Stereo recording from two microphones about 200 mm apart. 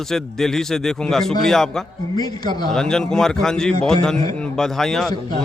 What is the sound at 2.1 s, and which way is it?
Speech, 20° left (ahead or behind).